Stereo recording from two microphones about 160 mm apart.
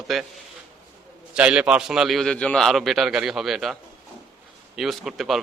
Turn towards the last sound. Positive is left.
turn(degrees=0)  # may be behind; listen again after turning